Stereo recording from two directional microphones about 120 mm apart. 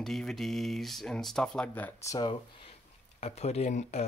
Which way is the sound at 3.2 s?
60° left (ahead or behind).